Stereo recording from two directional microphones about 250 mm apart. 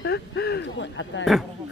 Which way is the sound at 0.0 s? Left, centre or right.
Left.